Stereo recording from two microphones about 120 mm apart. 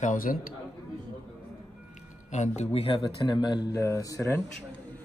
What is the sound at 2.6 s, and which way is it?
Speech, 55° left (ahead or behind).